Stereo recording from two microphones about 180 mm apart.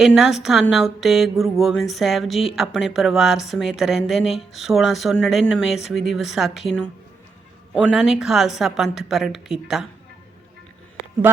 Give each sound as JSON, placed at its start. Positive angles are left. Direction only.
{"t": 0.0, "sound": "speech", "side_deg": -5}